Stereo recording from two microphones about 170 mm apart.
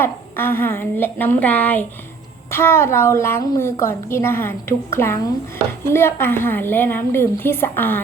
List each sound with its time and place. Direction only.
0.0 s a woman's voice: 15° left (ahead or behind)